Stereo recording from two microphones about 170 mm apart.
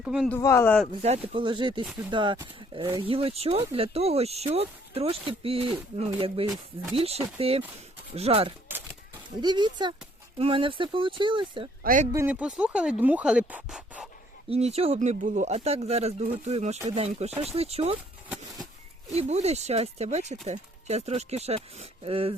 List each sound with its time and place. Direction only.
0.0 s speech: 5° right (ahead or behind)
0.3 s speech: 15° left (ahead or behind)
1.0 s speech: 35° right (ahead or behind)
11.8 s speech: 55° right (ahead or behind)
12.1 s speech: 10° right (ahead or behind)
14.5 s speech: 35° right (ahead or behind)
18.3 s a sound: centre (ahead or behind)
19.1 s speech: 40° right (ahead or behind)